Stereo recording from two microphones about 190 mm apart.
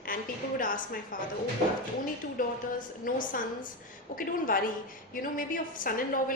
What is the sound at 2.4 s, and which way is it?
A woman's voice, 45° left (ahead or behind).